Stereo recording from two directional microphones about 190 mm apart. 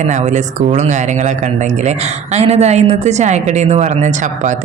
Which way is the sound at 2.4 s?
35° right (ahead or behind).